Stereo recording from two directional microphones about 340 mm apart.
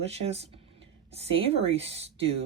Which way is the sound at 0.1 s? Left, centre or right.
Centre.